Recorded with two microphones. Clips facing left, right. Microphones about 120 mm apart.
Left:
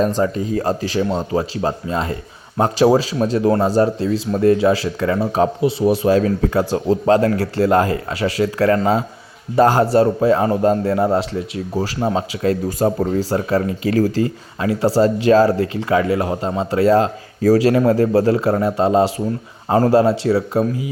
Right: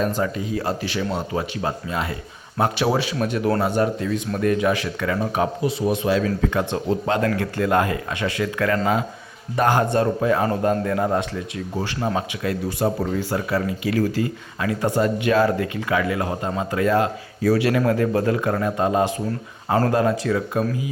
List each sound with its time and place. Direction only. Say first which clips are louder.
0.2 s a man's voice: left 5 dB; 40° left (ahead or behind)
12.4 s speech: left 8 dB; 40° left (ahead or behind)
14.6 s a man's voice: left 5 dB; 30° left (ahead or behind)